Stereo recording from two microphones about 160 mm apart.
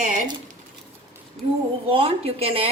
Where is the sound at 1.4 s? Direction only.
Centre (ahead or behind).